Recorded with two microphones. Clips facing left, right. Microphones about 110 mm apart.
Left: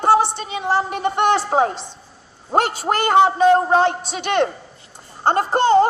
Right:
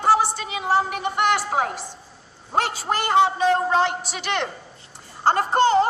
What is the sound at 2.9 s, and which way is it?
Speech, 55° left (ahead or behind).